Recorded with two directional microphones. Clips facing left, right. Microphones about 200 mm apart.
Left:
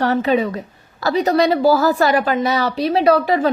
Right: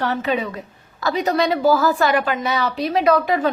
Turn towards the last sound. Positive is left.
turn(degrees=35)  # may be behind; listen again after turning